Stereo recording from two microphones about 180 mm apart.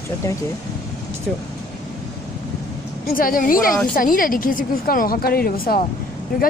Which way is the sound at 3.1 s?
50° left (ahead or behind).